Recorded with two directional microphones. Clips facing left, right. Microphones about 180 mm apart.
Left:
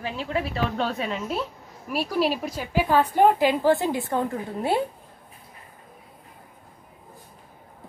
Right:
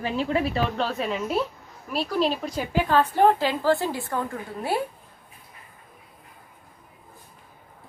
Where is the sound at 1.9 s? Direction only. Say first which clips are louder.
Even; 10° left (ahead or behind).